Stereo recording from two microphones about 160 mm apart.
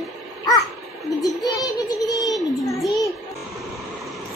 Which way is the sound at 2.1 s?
25° left (ahead or behind).